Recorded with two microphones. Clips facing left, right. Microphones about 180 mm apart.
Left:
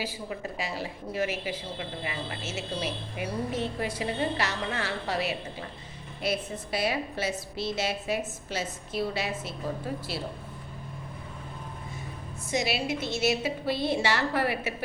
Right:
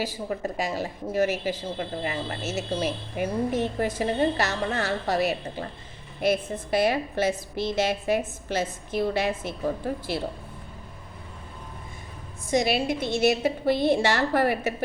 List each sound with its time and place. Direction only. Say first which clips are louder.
0.0 s a woman's voice: right 5 dB; 45° right (ahead or behind)
12.5 s a woman's voice: right 5 dB; 50° right (ahead or behind)